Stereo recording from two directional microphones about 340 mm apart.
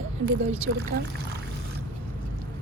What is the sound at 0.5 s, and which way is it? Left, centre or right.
Speech, right.